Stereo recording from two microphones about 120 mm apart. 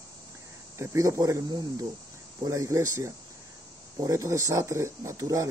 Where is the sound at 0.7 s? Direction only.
25° right (ahead or behind).